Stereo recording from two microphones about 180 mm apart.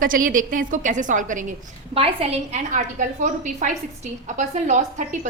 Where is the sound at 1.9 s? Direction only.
35° right (ahead or behind).